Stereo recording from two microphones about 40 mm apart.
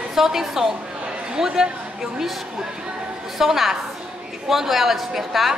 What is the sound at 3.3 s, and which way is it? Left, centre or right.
A woman's voice, centre.